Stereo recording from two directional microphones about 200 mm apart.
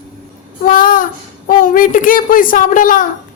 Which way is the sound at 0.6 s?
45° left (ahead or behind).